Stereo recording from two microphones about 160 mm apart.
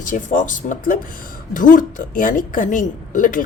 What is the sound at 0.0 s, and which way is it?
A woman's voice, 55° left (ahead or behind).